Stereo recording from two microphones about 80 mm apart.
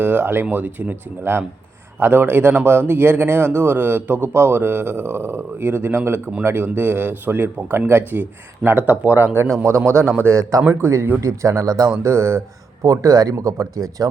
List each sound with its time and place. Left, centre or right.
0.0 s a man's voice: right
11.2 s speech: right
12.0 s speech: right